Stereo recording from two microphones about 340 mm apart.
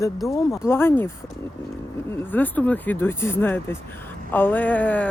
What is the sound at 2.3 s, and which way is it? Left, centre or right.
Speech, centre.